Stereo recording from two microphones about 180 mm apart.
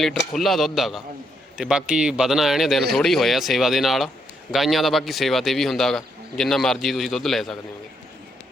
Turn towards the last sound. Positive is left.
turn(degrees=0)  # may be behind; listen again after turning